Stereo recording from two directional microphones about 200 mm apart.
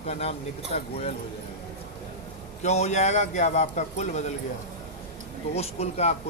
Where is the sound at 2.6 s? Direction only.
35° left (ahead or behind).